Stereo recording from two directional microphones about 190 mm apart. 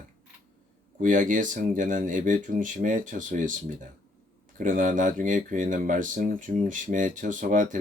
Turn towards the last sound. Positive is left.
turn(degrees=-40)  # may be behind; listen again after turning